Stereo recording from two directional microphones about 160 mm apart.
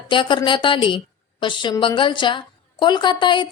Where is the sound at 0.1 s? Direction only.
30° left (ahead or behind).